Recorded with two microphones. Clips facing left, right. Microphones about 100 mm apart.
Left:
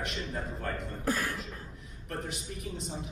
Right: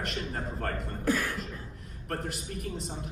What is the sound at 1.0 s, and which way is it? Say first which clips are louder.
Beatboxing: right 3 dB; 40° left (ahead or behind).